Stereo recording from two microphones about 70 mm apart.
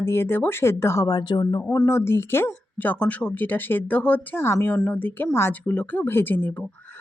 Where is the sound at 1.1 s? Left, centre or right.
Left.